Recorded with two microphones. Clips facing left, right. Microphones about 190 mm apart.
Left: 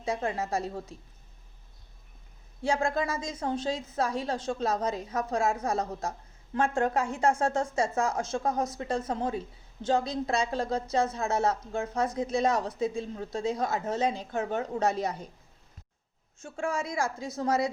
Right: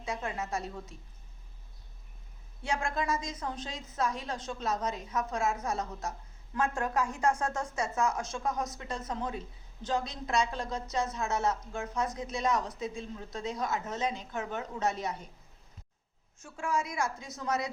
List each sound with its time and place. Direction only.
0.0 s a woman's voice: 35° left (ahead or behind)
2.6 s a woman's voice: 35° left (ahead or behind)
16.4 s a woman's voice: 25° left (ahead or behind)